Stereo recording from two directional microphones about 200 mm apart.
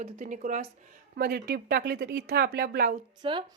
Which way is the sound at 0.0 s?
40° right (ahead or behind).